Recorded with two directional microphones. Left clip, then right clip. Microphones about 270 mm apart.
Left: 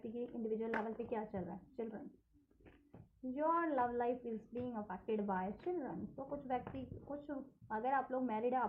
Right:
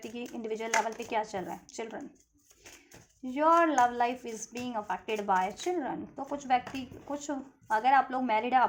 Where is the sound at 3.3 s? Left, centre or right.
Right.